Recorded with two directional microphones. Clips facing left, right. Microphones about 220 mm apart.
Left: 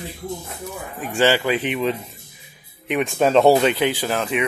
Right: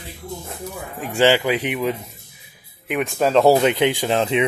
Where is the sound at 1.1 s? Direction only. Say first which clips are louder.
Right 2 dB; 10° right (ahead or behind).